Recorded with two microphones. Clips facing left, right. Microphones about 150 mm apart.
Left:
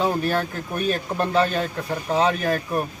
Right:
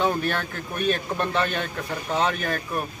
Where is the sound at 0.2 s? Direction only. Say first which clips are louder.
Left 4 dB; 35° left (ahead or behind).